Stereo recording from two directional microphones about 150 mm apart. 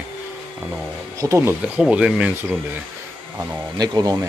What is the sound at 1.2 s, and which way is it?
Speech, 20° right (ahead or behind).